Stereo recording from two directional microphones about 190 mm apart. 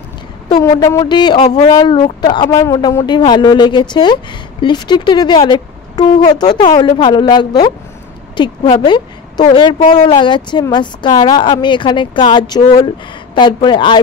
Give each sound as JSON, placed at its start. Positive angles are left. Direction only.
{"t": 0.6, "sound": "speech", "side_deg": 15}